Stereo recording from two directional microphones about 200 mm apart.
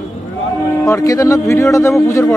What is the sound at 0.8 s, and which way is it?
A man's voice, 15° left (ahead or behind).